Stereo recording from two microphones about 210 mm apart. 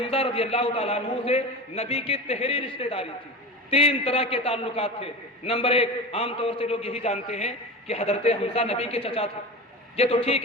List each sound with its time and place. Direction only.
0.0 s a man's voice: 25° left (ahead or behind)